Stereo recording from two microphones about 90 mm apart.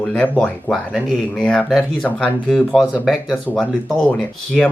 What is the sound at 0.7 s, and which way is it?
Speech, centre (ahead or behind).